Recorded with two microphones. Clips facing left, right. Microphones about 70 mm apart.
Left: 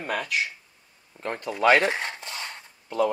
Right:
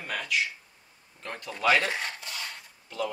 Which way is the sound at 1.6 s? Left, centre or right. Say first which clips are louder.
Left 5 dB; left.